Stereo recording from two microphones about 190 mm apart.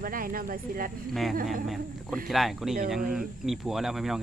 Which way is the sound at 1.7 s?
Centre (ahead or behind).